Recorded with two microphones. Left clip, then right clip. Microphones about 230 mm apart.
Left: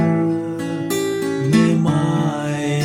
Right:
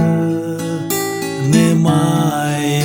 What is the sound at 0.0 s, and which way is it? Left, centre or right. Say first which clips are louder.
Music: right 1 dB; right.